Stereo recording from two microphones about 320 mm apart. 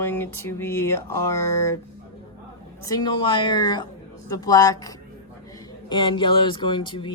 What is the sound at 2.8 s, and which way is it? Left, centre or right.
Speech, centre.